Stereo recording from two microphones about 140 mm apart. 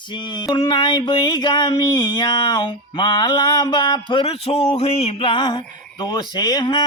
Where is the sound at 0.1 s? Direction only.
35° left (ahead or behind).